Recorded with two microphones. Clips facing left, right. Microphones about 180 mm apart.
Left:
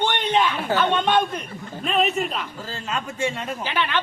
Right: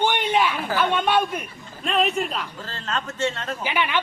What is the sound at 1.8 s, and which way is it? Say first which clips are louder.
A man's voice: even; centre (ahead or behind).